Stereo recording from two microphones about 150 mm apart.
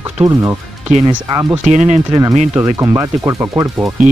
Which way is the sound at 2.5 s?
20° right (ahead or behind).